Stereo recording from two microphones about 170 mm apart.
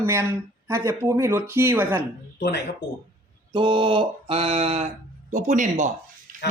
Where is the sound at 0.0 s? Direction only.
15° right (ahead or behind).